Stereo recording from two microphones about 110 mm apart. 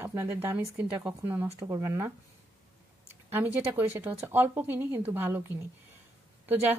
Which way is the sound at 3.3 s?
20° right (ahead or behind).